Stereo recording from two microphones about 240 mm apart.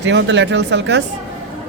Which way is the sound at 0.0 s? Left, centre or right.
Right.